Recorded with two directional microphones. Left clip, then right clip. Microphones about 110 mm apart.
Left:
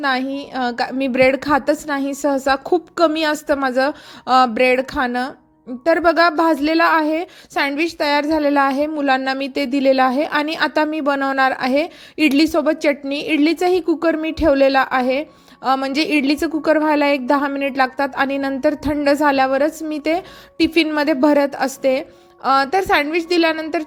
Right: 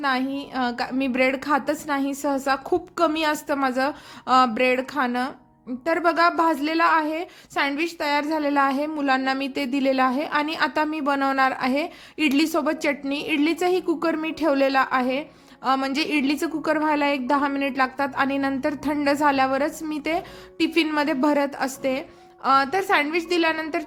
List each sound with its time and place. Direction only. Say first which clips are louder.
0.0 s a woman's voice: left 4 dB; 50° left (ahead or behind)